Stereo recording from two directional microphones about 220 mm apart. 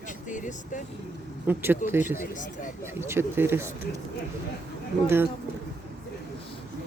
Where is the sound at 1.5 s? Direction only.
10° right (ahead or behind).